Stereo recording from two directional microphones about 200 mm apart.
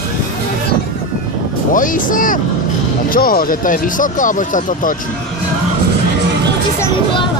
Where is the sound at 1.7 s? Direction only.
40° left (ahead or behind).